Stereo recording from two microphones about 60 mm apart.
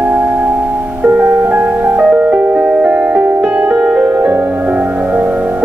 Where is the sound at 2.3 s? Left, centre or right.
Right.